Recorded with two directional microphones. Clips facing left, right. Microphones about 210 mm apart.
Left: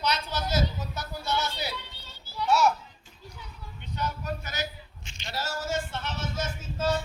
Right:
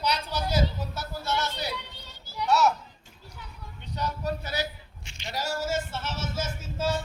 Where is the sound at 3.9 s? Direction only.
35° right (ahead or behind).